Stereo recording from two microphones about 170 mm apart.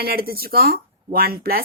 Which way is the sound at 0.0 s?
65° right (ahead or behind).